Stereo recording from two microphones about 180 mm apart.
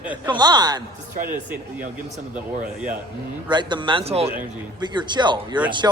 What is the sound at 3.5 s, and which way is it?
Speech, 25° right (ahead or behind).